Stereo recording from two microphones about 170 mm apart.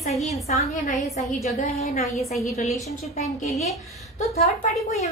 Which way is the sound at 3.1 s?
40° left (ahead or behind).